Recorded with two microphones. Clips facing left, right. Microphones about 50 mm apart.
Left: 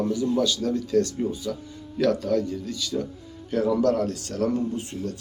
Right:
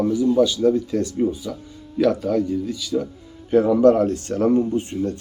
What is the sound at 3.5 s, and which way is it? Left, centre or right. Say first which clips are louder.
Speech: right 7 dB; right.